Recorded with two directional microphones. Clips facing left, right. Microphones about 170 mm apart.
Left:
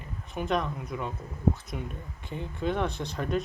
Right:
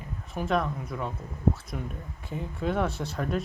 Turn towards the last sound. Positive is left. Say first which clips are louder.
# right 1 dB
turn(degrees=-5)  # may be behind; listen again after turning